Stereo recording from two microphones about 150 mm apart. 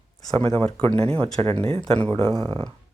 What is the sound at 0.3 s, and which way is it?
Speech, 40° right (ahead or behind).